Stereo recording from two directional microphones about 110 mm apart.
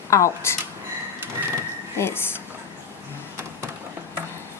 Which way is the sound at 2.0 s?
25° left (ahead or behind).